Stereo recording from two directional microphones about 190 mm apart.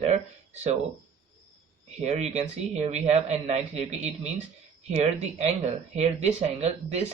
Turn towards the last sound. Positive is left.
turn(degrees=-35)  # may be behind; listen again after turning